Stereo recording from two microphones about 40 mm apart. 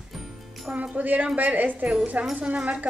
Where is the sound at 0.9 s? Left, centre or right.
Right.